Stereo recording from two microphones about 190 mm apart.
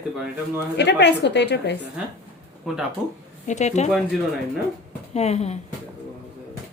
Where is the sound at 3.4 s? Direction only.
40° left (ahead or behind).